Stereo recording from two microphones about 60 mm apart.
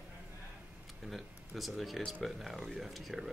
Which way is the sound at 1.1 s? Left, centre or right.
Centre.